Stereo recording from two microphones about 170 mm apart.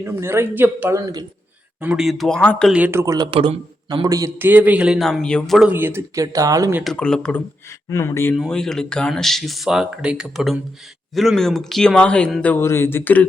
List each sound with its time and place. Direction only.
0.0 s a man's voice: 15° right (ahead or behind)
1.8 s speech: 5° right (ahead or behind)
2.7 s a man's voice: 10° right (ahead or behind)
3.2 s a man's voice: 35° right (ahead or behind)
3.8 s a man's voice: 25° right (ahead or behind); by 5.7 s centre (ahead or behind)
5.7 s a man's voice: 15° right (ahead or behind)
6.8 s speech: 5° left (ahead or behind)
7.9 s speech: 15° left (ahead or behind)
8.4 s speech: 5° left (ahead or behind)